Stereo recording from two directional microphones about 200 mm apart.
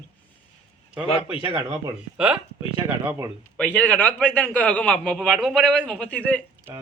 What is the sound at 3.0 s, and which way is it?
Speech, 15° right (ahead or behind).